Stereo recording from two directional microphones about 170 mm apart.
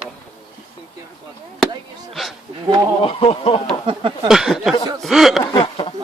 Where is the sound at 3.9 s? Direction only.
30° right (ahead or behind).